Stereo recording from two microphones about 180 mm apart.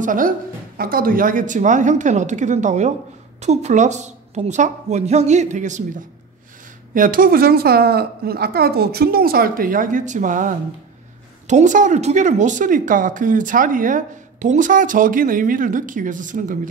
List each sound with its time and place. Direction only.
0.0 s a woman's voice: 50° right (ahead or behind)